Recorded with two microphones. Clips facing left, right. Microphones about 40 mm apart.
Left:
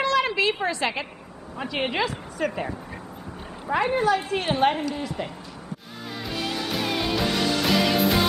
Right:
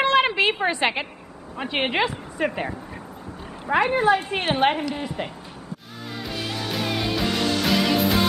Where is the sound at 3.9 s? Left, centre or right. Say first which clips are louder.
Right 2 dB; right.